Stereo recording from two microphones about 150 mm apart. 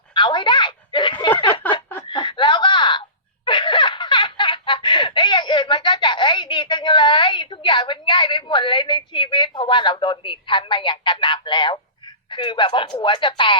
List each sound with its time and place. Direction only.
0.1 s a sound: 30° left (ahead or behind)
2.0 s chuckle: 30° left (ahead or behind)
3.4 s laughter: 30° left (ahead or behind)
12.3 s speech: 30° left (ahead or behind)